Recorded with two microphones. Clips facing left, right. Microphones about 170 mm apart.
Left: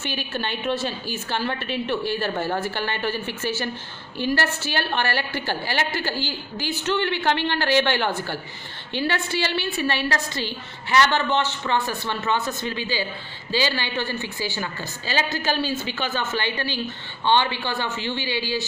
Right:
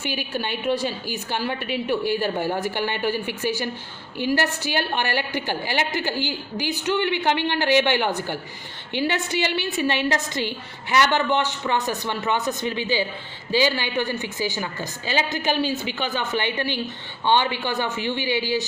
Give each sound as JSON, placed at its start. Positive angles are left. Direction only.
{"t": 0.0, "sound": "a woman's voice", "side_deg": -10}